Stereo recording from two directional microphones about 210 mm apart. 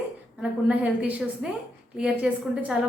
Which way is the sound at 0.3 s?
5° right (ahead or behind).